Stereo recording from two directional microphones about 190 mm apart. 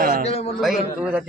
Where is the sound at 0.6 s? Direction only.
5° right (ahead or behind).